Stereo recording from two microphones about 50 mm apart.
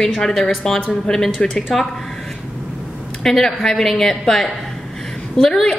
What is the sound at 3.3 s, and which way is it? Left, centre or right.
A woman's voice, centre.